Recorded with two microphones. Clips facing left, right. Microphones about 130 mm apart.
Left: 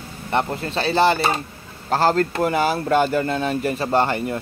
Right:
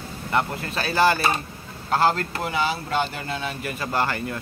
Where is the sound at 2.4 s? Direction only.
50° left (ahead or behind); by 4.3 s 25° left (ahead or behind).